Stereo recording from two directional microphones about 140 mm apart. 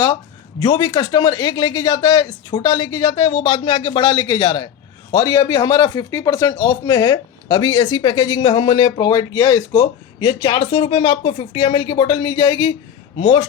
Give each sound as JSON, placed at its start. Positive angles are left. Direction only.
{"t": 0.6, "sound": "speech", "side_deg": 30}